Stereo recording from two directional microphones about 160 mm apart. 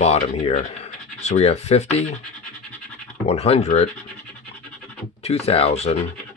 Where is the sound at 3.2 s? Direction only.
40° left (ahead or behind).